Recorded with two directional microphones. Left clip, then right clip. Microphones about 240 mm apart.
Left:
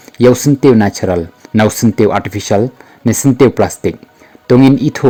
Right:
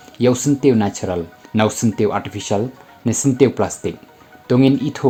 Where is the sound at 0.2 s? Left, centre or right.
Left.